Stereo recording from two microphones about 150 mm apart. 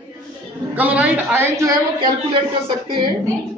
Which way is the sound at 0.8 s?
10° right (ahead or behind).